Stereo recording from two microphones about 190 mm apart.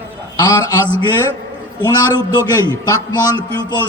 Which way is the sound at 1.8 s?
20° left (ahead or behind).